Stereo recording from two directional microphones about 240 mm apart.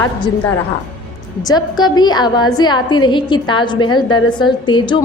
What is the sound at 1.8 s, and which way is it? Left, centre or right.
A woman's voice, centre.